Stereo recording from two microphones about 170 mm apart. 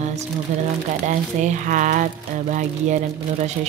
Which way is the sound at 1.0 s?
45° right (ahead or behind).